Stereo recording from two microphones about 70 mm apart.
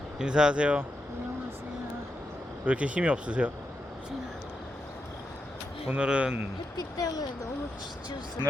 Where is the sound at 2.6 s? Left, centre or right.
Centre.